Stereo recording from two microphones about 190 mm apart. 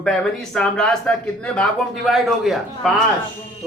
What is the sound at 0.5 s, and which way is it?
Speech, 5° left (ahead or behind).